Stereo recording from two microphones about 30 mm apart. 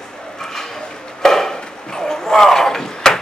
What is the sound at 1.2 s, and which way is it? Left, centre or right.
Chop, centre.